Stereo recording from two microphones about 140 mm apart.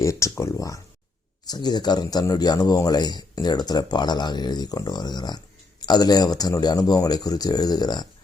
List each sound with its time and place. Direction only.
0.0 s a man's voice: 20° left (ahead or behind)